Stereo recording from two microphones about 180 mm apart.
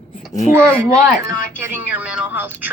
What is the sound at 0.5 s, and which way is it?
Speech, 15° right (ahead or behind).